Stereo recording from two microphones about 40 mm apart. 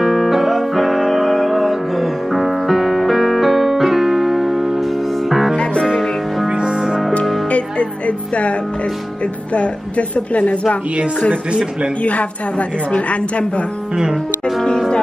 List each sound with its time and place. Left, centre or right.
0.0 s music: centre
6.5 s music: right
7.4 s music: left
9.5 s a woman's voice: left
12.0 s a woman's voice: left